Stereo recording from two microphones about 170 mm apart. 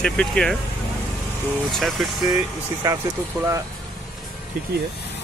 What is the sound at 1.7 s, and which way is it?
Speech, centre (ahead or behind).